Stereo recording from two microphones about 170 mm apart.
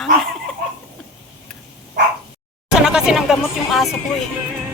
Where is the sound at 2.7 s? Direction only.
5° right (ahead or behind).